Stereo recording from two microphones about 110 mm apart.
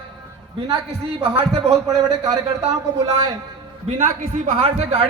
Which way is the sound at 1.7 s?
35° right (ahead or behind).